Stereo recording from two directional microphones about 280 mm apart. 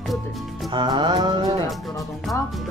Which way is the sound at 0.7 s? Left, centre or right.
Centre.